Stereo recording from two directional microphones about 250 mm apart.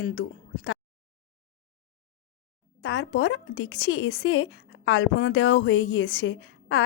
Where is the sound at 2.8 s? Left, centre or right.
Left.